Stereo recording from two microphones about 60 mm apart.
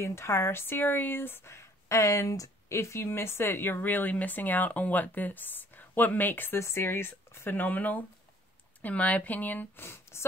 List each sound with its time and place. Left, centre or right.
0.0 s speech: left
6.6 s speech: left